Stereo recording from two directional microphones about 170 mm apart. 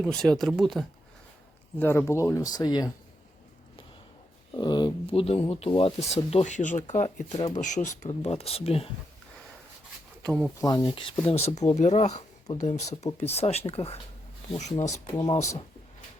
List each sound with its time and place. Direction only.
0.0 s speech: 5° left (ahead or behind)
1.8 s speech: 15° left (ahead or behind)
4.5 s speech: 25° left (ahead or behind)
10.2 s speech: 5° left (ahead or behind)
10.6 s speech: 25° left (ahead or behind)
15.1 s speech: 35° left (ahead or behind)